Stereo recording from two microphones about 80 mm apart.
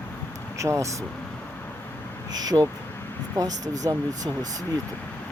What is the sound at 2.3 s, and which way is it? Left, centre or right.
Speech, right.